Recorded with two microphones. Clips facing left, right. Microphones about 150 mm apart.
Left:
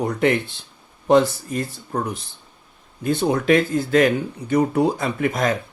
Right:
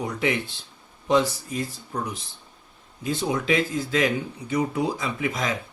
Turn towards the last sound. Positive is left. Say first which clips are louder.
# left 6 dB
turn(degrees=55)  # may be behind; listen again after turning